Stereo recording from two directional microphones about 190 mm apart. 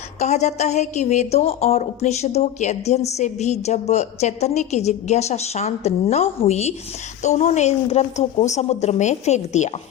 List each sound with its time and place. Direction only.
0.2 s a woman's voice: 35° left (ahead or behind)